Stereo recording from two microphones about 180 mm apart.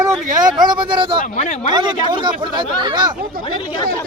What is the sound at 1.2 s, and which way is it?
Speech, 45° left (ahead or behind).